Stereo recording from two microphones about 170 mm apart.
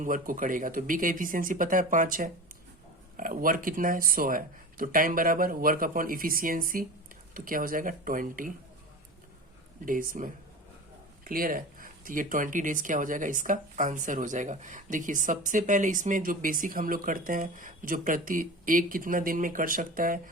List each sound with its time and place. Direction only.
0.0 s speech: 50° right (ahead or behind)
9.8 s speech: 55° right (ahead or behind)